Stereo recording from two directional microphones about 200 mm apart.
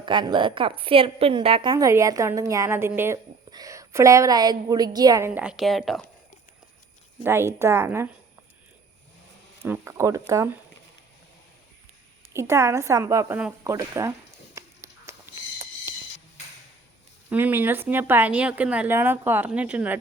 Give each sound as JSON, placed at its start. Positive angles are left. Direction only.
{"t": 0.0, "sound": "a woman's voice", "side_deg": -20}
{"t": 1.7, "sound": "a woman's voice", "side_deg": -15}
{"t": 7.3, "sound": "a woman's voice", "side_deg": -10}
{"t": 9.6, "sound": "a woman's voice", "side_deg": -15}
{"t": 12.3, "sound": "a woman's voice", "side_deg": -15}
{"t": 14.5, "sound": "a sound", "side_deg": -15}
{"t": 17.2, "sound": "a woman's voice", "side_deg": -10}